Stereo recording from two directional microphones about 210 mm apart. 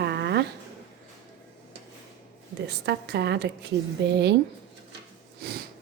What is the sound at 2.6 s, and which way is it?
Speech, 50° right (ahead or behind).